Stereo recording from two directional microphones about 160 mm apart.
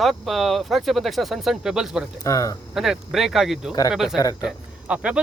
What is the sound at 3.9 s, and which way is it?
Speech, 5° right (ahead or behind).